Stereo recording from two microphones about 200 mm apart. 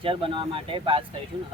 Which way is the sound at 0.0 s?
25° right (ahead or behind).